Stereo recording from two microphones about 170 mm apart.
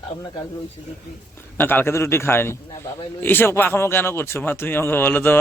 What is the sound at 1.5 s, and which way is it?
Speech, 10° left (ahead or behind).